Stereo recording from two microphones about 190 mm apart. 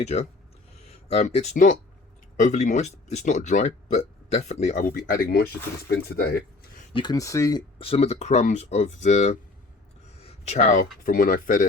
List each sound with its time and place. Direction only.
0.0 s speech: 35° left (ahead or behind); by 5.5 s 50° left (ahead or behind)
6.9 s speech: 20° left (ahead or behind)
7.8 s speech: 30° left (ahead or behind)
10.2 s a sound: 35° left (ahead or behind)
11.0 s speech: 50° left (ahead or behind)